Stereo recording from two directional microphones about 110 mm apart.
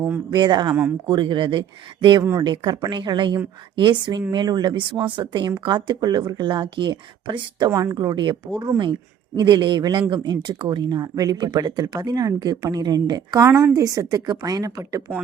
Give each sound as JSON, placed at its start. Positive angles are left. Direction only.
{"t": 0.3, "sound": "speech", "side_deg": -40}
{"t": 7.7, "sound": "speech", "side_deg": -25}
{"t": 7.9, "sound": "speech", "side_deg": -40}